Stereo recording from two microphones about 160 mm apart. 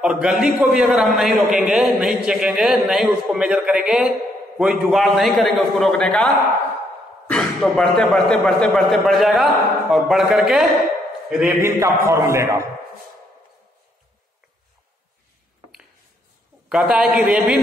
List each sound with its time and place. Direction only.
0.0 s a man's voice: 5° right (ahead or behind)
11.6 s a man's voice: 15° right (ahead or behind)
16.6 s a man's voice: 5° right (ahead or behind)